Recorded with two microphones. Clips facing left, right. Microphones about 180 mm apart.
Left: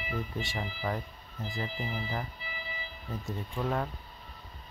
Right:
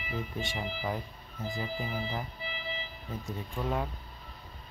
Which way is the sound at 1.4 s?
20° right (ahead or behind).